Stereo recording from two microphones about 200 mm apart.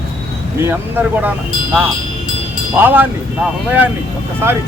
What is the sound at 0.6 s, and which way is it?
Speech, 10° right (ahead or behind).